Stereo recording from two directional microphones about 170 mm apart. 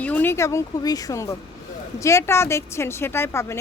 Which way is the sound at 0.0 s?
10° left (ahead or behind).